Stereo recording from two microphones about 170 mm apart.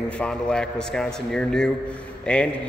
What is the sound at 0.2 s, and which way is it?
A man's voice, 5° left (ahead or behind).